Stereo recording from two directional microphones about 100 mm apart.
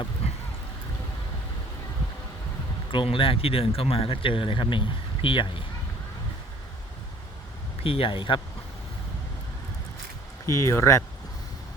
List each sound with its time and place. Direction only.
2.9 s speech: 60° left (ahead or behind)
7.9 s speech: 65° left (ahead or behind)
10.4 s speech: 30° left (ahead or behind)